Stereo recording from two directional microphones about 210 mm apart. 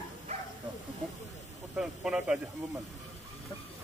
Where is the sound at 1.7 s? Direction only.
Centre (ahead or behind).